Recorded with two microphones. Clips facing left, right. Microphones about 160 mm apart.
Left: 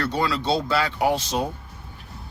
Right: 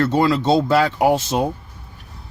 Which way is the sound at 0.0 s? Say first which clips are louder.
Right 7 dB; 45° right (ahead or behind).